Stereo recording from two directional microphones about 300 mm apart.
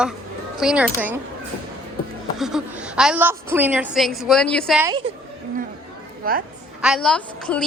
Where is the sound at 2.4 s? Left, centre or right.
Centre.